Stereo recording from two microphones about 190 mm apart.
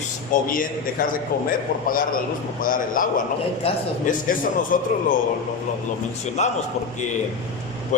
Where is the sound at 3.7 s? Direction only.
30° left (ahead or behind).